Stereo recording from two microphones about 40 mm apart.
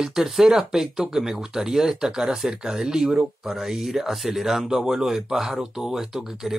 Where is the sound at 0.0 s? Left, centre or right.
Centre.